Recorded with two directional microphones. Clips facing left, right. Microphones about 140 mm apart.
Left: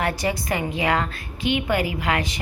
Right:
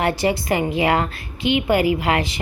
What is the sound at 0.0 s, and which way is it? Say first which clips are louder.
A woman's voice: right 4 dB; 30° right (ahead or behind).